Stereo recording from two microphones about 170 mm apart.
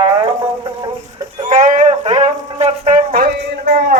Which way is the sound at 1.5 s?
50° right (ahead or behind).